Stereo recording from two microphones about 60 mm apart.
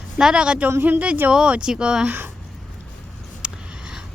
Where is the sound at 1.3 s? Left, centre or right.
Centre.